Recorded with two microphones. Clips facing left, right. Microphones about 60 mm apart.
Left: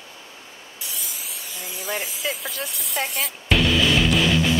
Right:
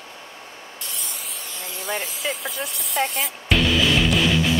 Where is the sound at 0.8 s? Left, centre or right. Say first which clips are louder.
Even; centre.